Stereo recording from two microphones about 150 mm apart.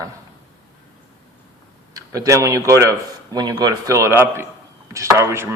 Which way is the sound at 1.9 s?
25° right (ahead or behind).